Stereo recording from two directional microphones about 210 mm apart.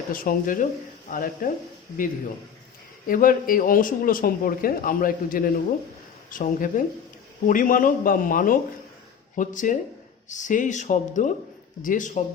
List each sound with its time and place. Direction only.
0.1 s a man's voice: 40° left (ahead or behind)
3.1 s a man's voice: 40° left (ahead or behind)